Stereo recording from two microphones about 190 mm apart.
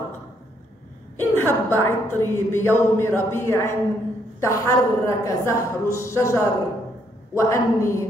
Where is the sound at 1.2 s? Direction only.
10° left (ahead or behind).